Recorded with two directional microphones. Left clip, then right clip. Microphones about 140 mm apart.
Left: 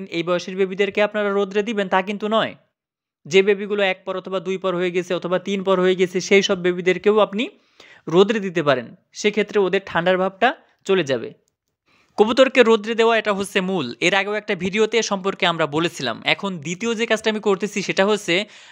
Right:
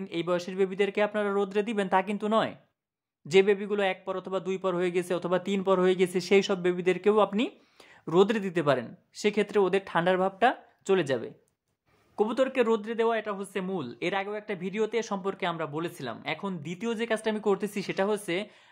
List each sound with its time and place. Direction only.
0.0 s a man's voice: 25° left (ahead or behind)
12.2 s speech: 35° left (ahead or behind)
13.3 s speech: 50° left (ahead or behind)
16.3 s a man's voice: 25° left (ahead or behind)